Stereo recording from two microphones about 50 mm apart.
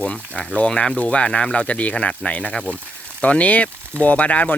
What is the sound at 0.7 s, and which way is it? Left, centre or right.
Speech, centre.